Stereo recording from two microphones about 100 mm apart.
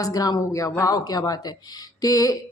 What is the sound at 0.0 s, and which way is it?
A woman's voice, 35° left (ahead or behind).